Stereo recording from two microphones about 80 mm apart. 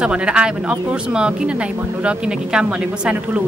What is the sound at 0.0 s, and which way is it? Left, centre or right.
A woman's voice, centre.